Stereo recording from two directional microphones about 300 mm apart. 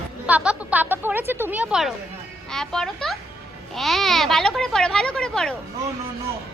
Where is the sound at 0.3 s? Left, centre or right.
Centre.